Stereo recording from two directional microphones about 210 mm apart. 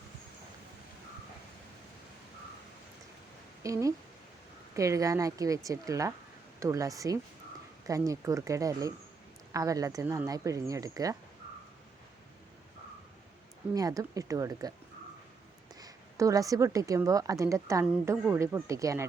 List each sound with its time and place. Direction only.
3.6 s a woman's voice: 15° right (ahead or behind)
13.7 s a woman's voice: 15° right (ahead or behind)
15.7 s a woman's voice: 15° right (ahead or behind)